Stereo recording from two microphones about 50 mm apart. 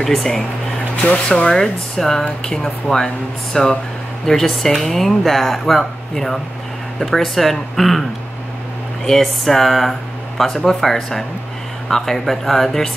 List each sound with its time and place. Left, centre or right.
0.0 s speech: centre
1.0 s speech: left
1.5 s speech: centre
9.0 s speech: centre